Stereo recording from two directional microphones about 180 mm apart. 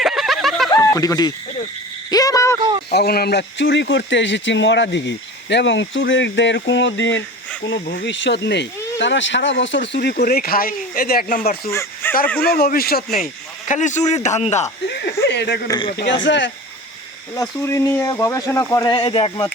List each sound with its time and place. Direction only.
0.0 s snicker: centre (ahead or behind)
0.8 s speech: 20° left (ahead or behind)
2.0 s a sound: 20° left (ahead or behind)
2.6 s a sound: 25° right (ahead or behind)
2.9 s speech: 60° left (ahead or behind); by 7.2 s 90° left
7.6 s speech: 75° left (ahead or behind); by 11.7 s 50° left (ahead or behind)
11.7 s speech: 15° left (ahead or behind)
12.5 s a man's voice: 60° left (ahead or behind)
13.1 s speech: 45° left (ahead or behind)
14.8 s a sound: 65° left (ahead or behind)
15.6 s speech: 25° left (ahead or behind)
16.2 s speech: 90° left
17.3 s speech: 20° left (ahead or behind)
18.9 s speech: 30° left (ahead or behind)